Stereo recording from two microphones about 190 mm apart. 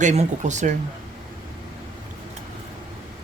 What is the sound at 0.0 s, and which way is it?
Speech, 40° right (ahead or behind).